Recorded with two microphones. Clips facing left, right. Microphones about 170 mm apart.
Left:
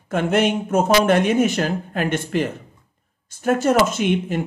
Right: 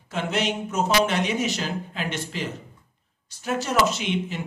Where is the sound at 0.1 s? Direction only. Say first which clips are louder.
Left 7 dB; 50° left (ahead or behind).